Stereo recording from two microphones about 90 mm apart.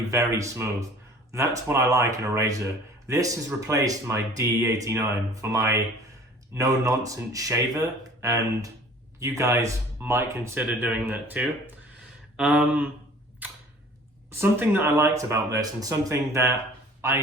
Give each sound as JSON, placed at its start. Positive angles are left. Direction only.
{"t": 0.1, "sound": "speech", "side_deg": -35}
{"t": 12.4, "sound": "a sound", "side_deg": -15}
{"t": 13.4, "sound": "cap gun", "side_deg": -20}
{"t": 14.3, "sound": "speech", "side_deg": -25}